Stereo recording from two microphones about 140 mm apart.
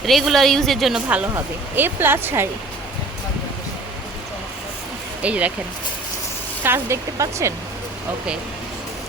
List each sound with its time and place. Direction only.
0.0 s a woman's voice: centre (ahead or behind); by 2.5 s 15° right (ahead or behind)
5.2 s speech: 10° right (ahead or behind)
6.6 s speech: 15° right (ahead or behind)